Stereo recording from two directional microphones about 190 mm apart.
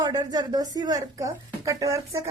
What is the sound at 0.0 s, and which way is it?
A woman's voice, 20° right (ahead or behind).